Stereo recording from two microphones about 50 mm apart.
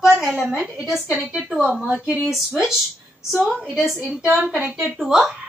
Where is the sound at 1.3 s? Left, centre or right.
Centre.